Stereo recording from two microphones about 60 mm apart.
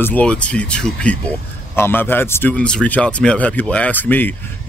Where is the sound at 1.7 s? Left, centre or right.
Left.